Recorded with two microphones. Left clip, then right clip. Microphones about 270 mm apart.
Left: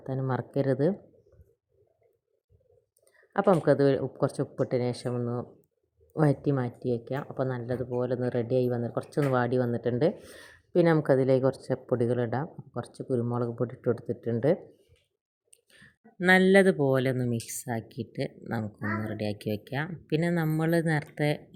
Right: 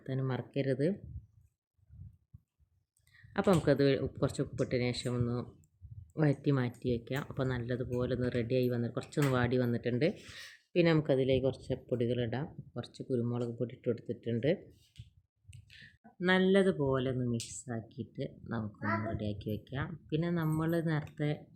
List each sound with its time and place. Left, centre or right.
0.0 s speech: centre
0.5 s speech: centre
3.3 s speech: centre
6.1 s speech: centre
15.8 s speech: centre